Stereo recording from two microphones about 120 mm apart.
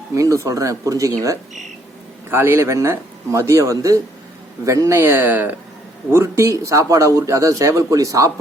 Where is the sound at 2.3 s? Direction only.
20° right (ahead or behind).